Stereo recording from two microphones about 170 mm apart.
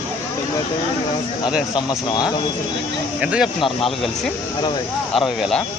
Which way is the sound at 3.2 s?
5° right (ahead or behind).